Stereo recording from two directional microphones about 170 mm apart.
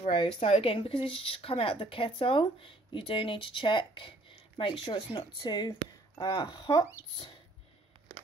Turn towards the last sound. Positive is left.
turn(degrees=25)  # may be behind; listen again after turning